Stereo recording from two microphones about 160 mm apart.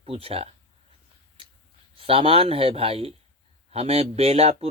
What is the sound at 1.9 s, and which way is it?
Speech, 35° right (ahead or behind).